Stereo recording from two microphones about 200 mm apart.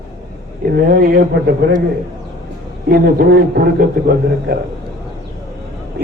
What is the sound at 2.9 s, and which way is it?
A man's voice, 55° right (ahead or behind).